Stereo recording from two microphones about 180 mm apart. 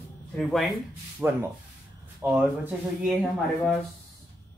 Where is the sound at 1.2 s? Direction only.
10° right (ahead or behind).